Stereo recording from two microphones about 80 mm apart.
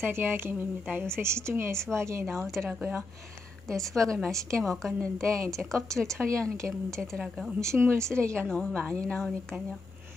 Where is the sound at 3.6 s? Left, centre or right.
Centre.